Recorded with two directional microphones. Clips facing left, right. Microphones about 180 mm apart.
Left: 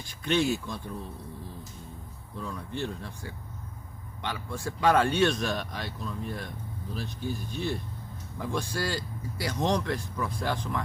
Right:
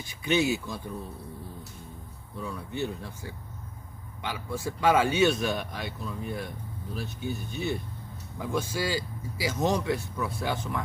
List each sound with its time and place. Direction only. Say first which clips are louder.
0.0 s speech: right 1 dB; 5° right (ahead or behind)
2.4 s speech: right 2 dB; 5° right (ahead or behind)
4.2 s speech: right 1 dB; 5° right (ahead or behind)